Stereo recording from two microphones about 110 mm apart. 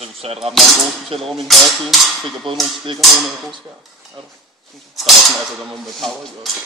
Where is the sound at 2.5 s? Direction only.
50° right (ahead or behind).